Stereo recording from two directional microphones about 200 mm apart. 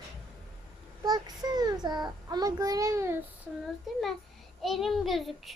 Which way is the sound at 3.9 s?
Centre (ahead or behind).